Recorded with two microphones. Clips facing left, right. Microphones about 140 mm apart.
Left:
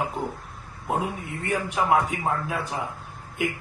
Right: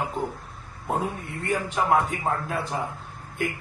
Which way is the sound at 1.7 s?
Centre (ahead or behind).